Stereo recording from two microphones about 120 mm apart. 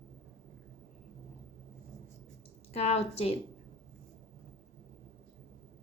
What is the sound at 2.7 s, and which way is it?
Speech, 60° left (ahead or behind).